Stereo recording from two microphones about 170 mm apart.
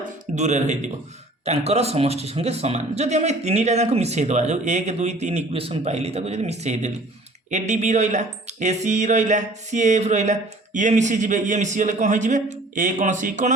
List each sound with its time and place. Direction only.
0.3 s speech: 45° right (ahead or behind)